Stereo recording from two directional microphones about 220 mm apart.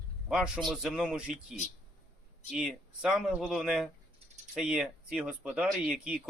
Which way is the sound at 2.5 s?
Centre (ahead or behind).